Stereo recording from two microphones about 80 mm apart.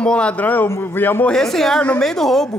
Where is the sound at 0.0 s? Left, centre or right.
Centre.